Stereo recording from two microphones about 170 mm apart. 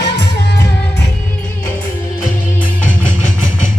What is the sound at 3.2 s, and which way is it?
Vehicle, 45° left (ahead or behind).